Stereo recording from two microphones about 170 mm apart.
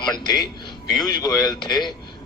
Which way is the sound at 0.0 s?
25° left (ahead or behind).